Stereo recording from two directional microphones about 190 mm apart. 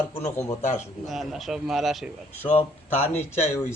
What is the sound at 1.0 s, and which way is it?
Speech, centre (ahead or behind).